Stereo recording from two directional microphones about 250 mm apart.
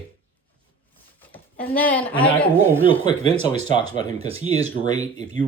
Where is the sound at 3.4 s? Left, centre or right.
Right.